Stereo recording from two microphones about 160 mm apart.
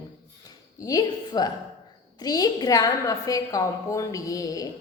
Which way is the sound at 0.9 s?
25° left (ahead or behind).